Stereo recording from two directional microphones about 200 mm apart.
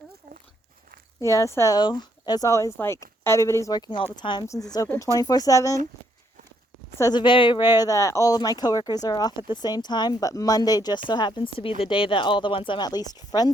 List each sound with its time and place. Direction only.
1.2 s speech: 15° left (ahead or behind)
7.0 s speech: 20° left (ahead or behind)